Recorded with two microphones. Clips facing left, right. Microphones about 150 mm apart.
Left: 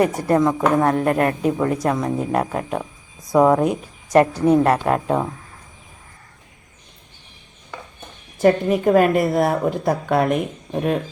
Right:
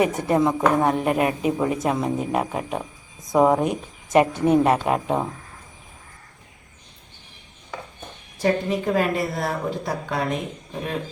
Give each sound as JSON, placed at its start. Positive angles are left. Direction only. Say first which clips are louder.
{"t": 0.3, "sound": "speech", "louder": "left 2 dB", "side_deg": -5}
{"t": 8.4, "sound": "speech", "louder": "left 6 dB", "side_deg": 55}